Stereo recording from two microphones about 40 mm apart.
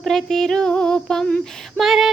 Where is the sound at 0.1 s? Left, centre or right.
Centre.